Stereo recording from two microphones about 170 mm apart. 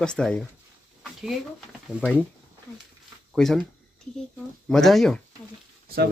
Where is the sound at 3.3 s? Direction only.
Centre (ahead or behind).